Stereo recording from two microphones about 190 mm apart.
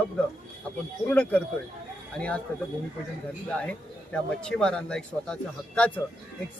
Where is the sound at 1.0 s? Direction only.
10° left (ahead or behind).